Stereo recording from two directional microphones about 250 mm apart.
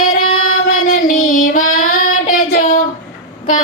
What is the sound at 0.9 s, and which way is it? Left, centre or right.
Child singing, left.